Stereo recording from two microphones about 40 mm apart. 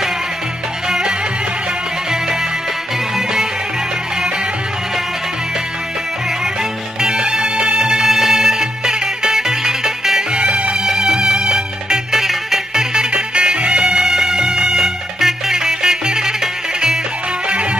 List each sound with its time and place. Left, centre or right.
0.8 s music: centre
7.0 s music: right
10.3 s music: right
17.5 s music: right